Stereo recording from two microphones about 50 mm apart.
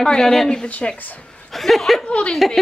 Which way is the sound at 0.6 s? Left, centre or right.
Left.